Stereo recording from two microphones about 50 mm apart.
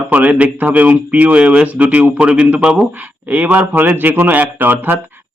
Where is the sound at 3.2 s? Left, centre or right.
Right.